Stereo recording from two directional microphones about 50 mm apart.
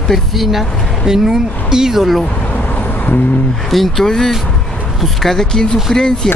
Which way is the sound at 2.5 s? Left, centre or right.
Left.